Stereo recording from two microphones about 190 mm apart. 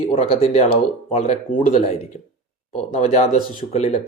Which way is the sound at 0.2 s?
30° left (ahead or behind).